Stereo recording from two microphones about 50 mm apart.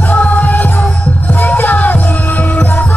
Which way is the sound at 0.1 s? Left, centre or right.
Left.